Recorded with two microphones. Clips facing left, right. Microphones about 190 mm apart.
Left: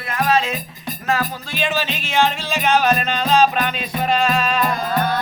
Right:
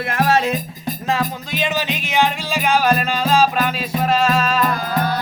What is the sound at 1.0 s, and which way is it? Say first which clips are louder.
Music: even; 20° right (ahead or behind).